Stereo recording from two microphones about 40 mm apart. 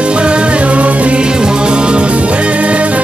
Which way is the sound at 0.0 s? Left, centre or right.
Right.